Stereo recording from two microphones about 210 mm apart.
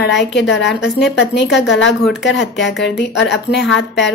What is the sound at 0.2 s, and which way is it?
Speech, 55° left (ahead or behind).